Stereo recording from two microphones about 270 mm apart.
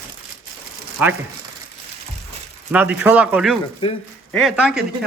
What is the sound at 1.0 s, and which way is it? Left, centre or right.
Speech, centre.